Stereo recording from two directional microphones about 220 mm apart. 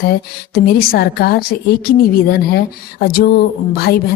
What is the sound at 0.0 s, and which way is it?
A woman's voice, 40° left (ahead or behind).